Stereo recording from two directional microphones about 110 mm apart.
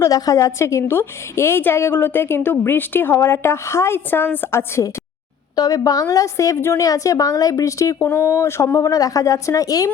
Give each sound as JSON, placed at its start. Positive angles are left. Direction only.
{"t": 0.0, "sound": "a woman's voice", "side_deg": 30}
{"t": 5.5, "sound": "a woman's voice", "side_deg": 35}